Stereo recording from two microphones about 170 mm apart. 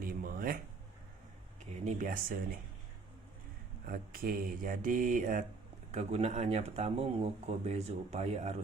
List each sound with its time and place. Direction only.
0.0 s a sound: 60° right (ahead or behind)
1.7 s speech: 50° right (ahead or behind)
3.8 s mantra: 60° right (ahead or behind)
5.9 s speech: 40° right (ahead or behind)